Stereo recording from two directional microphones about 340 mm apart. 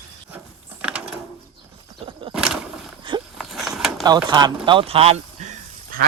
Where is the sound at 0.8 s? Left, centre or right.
Centre.